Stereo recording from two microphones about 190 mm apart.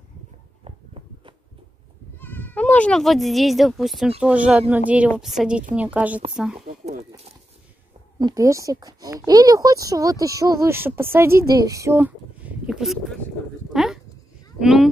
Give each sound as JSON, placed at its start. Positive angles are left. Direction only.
{"t": 0.7, "sound": "a sound", "side_deg": -30}
{"t": 2.1, "sound": "a woman's voice", "side_deg": 10}
{"t": 6.6, "sound": "a sound", "side_deg": -35}
{"t": 8.2, "sound": "speech", "side_deg": -20}
{"t": 13.7, "sound": "sheep", "side_deg": 0}
{"t": 14.6, "sound": "speech", "side_deg": -5}